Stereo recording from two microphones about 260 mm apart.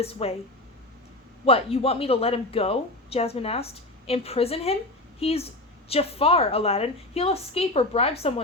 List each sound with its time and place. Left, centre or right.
0.0 s a woman's voice: left
1.5 s a woman's voice: left